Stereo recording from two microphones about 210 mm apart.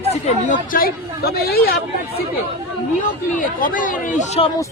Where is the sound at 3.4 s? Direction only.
40° left (ahead or behind).